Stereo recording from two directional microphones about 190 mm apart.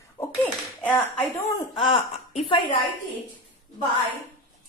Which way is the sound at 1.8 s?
25° left (ahead or behind).